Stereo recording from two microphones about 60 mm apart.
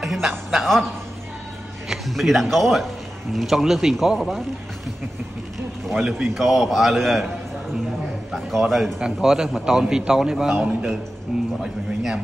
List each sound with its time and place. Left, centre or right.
0.0 s a woman's voice: centre
1.9 s speech: centre
6.0 s a man's voice: centre
6.3 s speech: centre
8.3 s speech: centre
9.0 s a man's voice: centre